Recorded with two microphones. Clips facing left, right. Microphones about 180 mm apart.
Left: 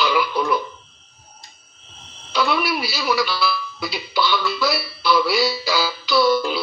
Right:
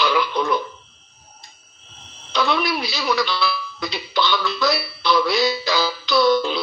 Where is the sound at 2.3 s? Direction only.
5° left (ahead or behind).